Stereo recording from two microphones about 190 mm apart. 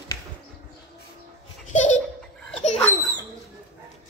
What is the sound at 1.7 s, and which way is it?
Laughter, 40° left (ahead or behind).